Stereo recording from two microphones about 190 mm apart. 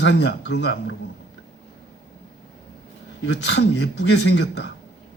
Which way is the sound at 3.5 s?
65° left (ahead or behind).